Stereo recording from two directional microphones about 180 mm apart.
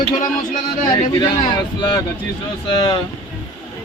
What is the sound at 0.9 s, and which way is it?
Speech, 25° left (ahead or behind).